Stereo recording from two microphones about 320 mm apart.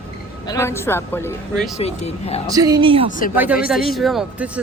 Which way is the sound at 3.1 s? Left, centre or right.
Left.